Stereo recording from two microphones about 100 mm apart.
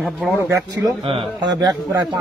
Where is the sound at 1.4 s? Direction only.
40° right (ahead or behind).